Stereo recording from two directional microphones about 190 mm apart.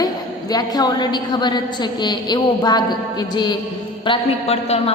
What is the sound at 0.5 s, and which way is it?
A man's voice, 20° left (ahead or behind).